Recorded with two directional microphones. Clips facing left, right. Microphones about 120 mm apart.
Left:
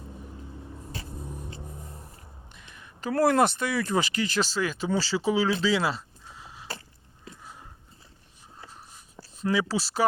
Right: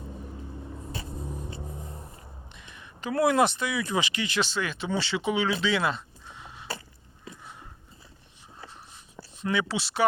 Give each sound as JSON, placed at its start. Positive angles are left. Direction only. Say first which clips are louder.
{"t": 1.2, "sound": "vehicle", "louder": "right 2 dB", "side_deg": 0}
{"t": 1.6, "sound": "a sound", "louder": "right 3 dB", "side_deg": -5}
{"t": 2.5, "sound": "speech", "louder": "right 2 dB", "side_deg": 40}
{"t": 9.4, "sound": "speech", "louder": "left 2 dB", "side_deg": 35}